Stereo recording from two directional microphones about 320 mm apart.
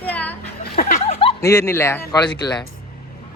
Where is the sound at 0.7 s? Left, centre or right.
Left.